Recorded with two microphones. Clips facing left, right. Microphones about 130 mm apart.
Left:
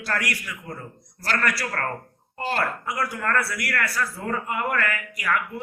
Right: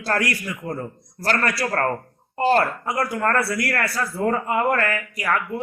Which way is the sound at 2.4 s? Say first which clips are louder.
Right 8 dB; 35° right (ahead or behind).